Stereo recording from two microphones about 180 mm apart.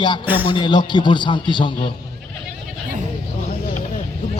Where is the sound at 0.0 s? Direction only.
25° left (ahead or behind).